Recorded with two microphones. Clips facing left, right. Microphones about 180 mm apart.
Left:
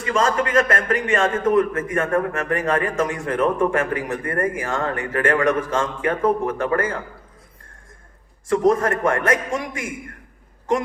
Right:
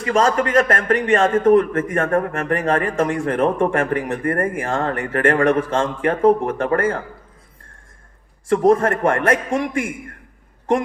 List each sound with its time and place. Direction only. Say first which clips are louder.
0.0 s a man's voice: right 3 dB; 40° right (ahead or behind)
8.6 s a man's voice: right 3 dB; 30° right (ahead or behind)